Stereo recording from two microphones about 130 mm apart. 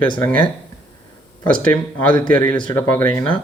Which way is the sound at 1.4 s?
10° left (ahead or behind).